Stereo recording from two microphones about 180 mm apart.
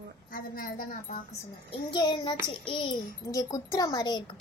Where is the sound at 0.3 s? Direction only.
50° left (ahead or behind).